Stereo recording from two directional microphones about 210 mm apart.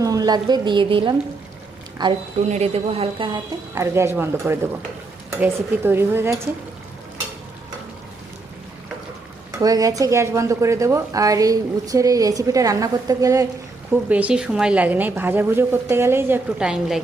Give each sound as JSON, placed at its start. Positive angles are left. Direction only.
{"t": 0.0, "sound": "a woman's voice", "side_deg": -15}
{"t": 3.8, "sound": "speech", "side_deg": -15}
{"t": 9.6, "sound": "speech", "side_deg": -15}